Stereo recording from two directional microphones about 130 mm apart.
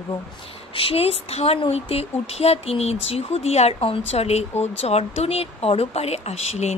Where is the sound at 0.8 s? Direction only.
45° left (ahead or behind).